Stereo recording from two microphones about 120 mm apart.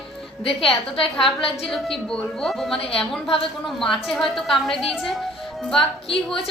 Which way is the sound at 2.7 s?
50° left (ahead or behind).